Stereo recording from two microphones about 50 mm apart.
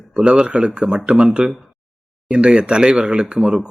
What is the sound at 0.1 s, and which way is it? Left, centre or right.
A man's voice, centre.